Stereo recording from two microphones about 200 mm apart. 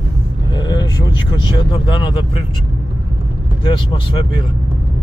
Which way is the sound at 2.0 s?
25° left (ahead or behind).